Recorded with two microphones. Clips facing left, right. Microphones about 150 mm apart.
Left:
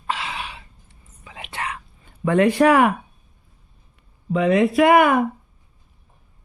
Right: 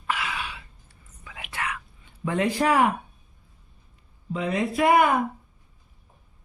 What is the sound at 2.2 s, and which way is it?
Speech, 65° left (ahead or behind).